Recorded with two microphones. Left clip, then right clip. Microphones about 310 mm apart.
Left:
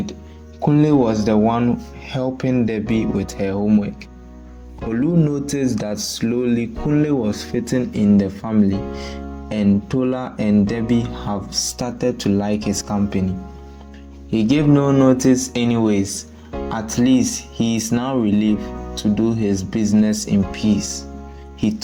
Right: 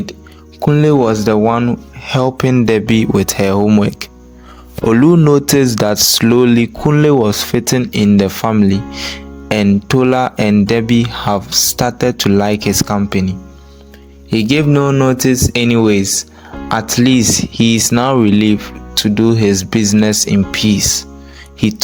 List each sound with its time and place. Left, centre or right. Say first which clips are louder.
0.6 s speech: right 5 dB; right
14.3 s speech: right 4 dB; right